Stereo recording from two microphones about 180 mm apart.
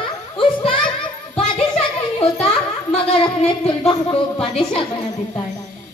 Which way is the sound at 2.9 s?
30° left (ahead or behind).